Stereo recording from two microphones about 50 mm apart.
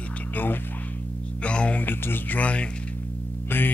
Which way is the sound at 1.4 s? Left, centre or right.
Left.